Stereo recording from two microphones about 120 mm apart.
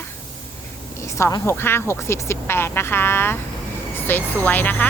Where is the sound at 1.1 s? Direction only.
25° left (ahead or behind).